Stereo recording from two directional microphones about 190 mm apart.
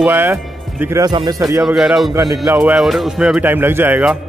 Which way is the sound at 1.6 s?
Centre (ahead or behind).